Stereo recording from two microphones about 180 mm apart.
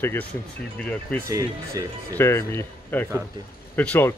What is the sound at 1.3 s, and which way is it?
Speech, 20° right (ahead or behind).